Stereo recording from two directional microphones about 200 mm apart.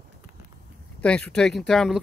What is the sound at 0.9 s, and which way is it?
Speech, 5° left (ahead or behind).